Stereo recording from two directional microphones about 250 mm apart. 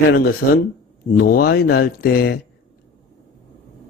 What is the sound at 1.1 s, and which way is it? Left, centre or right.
A man's voice, left.